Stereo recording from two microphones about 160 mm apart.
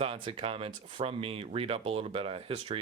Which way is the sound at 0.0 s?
35° right (ahead or behind).